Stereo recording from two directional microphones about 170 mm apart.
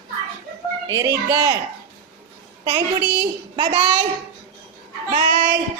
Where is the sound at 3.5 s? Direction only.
30° right (ahead or behind).